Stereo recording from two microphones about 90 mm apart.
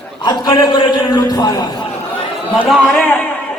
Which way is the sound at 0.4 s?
35° left (ahead or behind).